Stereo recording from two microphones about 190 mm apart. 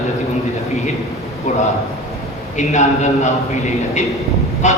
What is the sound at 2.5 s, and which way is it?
Speech, 40° left (ahead or behind).